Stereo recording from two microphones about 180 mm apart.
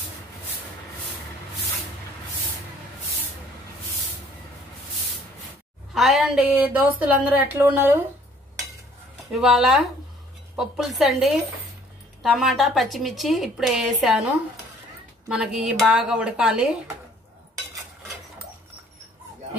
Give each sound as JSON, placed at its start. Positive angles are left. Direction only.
{"t": 5.9, "sound": "a woman's voice", "side_deg": 0}
{"t": 9.3, "sound": "a woman's voice", "side_deg": 0}
{"t": 15.2, "sound": "a woman's voice", "side_deg": 0}